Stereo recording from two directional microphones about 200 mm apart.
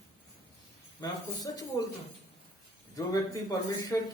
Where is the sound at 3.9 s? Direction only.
15° left (ahead or behind).